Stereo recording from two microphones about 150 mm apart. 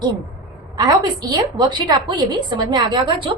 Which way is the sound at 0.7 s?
25° right (ahead or behind).